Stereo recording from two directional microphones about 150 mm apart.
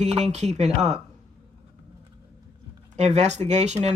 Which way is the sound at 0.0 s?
45° right (ahead or behind).